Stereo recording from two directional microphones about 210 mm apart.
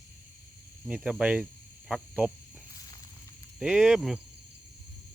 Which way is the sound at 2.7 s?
15° left (ahead or behind).